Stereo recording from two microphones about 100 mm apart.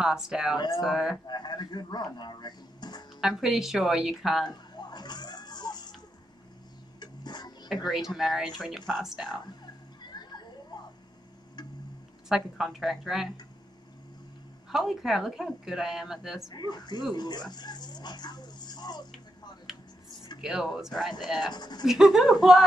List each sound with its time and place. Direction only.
0.0 s speech: 5° right (ahead or behind)
1.1 s speech: 45° left (ahead or behind)
3.2 s speech: 5° right (ahead or behind)
4.5 s a sound: 45° left (ahead or behind)
7.0 s music: 45° left (ahead or behind)
7.9 s speech: 5° right (ahead or behind)
10.0 s children playing: 45° left (ahead or behind)
12.3 s speech: 5° right (ahead or behind)
14.7 s speech: centre (ahead or behind)
16.4 s speech: 45° left (ahead or behind)
20.3 s speech: 5° right (ahead or behind)
21.5 s speech: 45° left (ahead or behind)
21.8 s speech: 5° right (ahead or behind)